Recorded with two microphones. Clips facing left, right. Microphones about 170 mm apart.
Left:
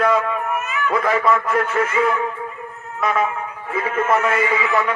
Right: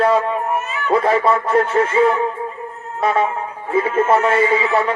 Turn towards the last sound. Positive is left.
turn(degrees=-30)  # may be behind; listen again after turning